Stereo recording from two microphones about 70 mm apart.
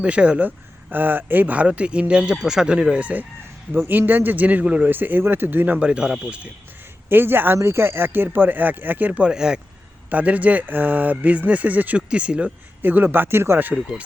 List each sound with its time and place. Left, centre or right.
0.0 s speech: centre
7.1 s speech: right
9.2 s speech: centre; by 13.7 s right